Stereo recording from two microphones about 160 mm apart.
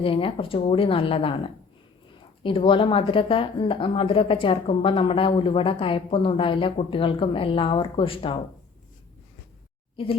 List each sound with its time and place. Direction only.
0.0 s speech: 35° left (ahead or behind)